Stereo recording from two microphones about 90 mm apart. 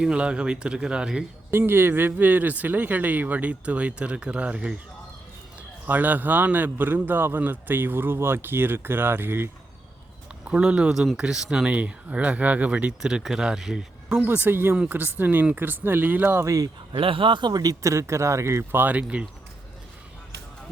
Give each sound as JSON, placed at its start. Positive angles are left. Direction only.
{"t": 0.0, "sound": "speech", "side_deg": -10}
{"t": 1.5, "sound": "a man's voice", "side_deg": -25}
{"t": 5.8, "sound": "a man's voice", "side_deg": -20}
{"t": 10.4, "sound": "speech", "side_deg": -10}
{"t": 14.2, "sound": "a man's voice", "side_deg": -20}
{"t": 16.9, "sound": "speech", "side_deg": -80}